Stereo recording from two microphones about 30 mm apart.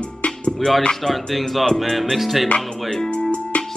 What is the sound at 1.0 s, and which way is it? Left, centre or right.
Speech, centre.